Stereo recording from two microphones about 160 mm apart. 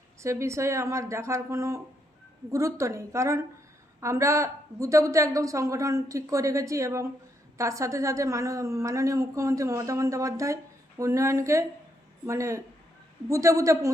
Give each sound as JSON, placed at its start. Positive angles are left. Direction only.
{"t": 0.2, "sound": "a woman's voice", "side_deg": -20}